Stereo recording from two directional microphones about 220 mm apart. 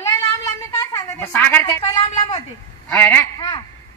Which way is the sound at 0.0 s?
15° left (ahead or behind).